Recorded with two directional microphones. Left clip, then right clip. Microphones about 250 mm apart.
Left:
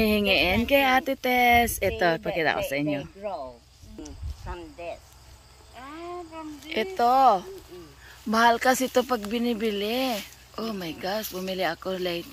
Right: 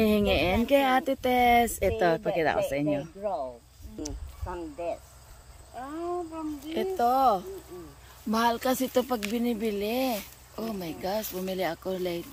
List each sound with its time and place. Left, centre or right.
0.0 s a sound: centre
0.7 s speech: centre
3.2 s speech: right
4.6 s snake: right
5.8 s speech: right
6.7 s speech: centre